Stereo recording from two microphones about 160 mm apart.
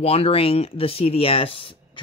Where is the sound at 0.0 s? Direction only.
40° left (ahead or behind).